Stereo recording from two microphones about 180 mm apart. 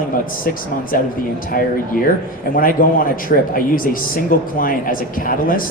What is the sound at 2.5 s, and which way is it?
Speech, 50° left (ahead or behind).